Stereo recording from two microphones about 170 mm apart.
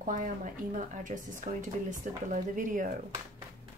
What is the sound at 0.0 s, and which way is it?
Speech, 50° right (ahead or behind).